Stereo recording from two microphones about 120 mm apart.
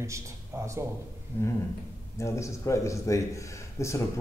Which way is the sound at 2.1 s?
25° left (ahead or behind).